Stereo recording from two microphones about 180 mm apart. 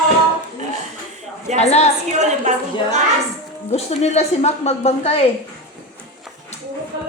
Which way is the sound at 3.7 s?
35° left (ahead or behind).